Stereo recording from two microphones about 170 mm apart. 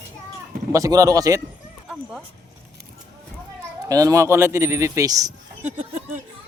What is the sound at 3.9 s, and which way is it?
Speech, 20° right (ahead or behind).